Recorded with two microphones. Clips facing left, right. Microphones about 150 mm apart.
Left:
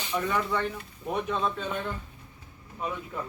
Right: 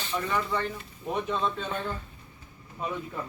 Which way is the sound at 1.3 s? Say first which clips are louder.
Even; 5° left (ahead or behind).